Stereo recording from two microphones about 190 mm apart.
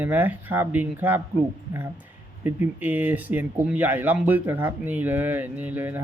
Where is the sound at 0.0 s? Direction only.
10° right (ahead or behind).